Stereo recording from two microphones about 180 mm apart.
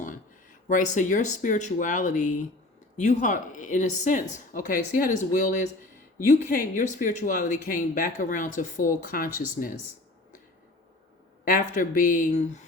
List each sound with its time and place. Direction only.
0.7 s speech: 45° left (ahead or behind)
11.4 s speech: 50° left (ahead or behind)